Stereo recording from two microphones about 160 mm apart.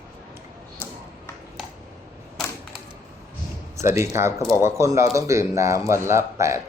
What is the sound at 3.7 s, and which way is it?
Speech, 15° right (ahead or behind).